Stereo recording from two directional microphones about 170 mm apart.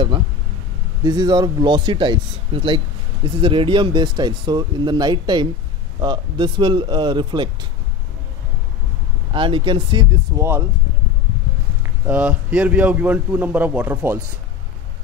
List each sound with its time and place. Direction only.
1.0 s speech: 25° right (ahead or behind)
9.3 s speech: 30° right (ahead or behind)
10.4 s a man's voice: 15° right (ahead or behind)
12.1 s a man's voice: 10° right (ahead or behind)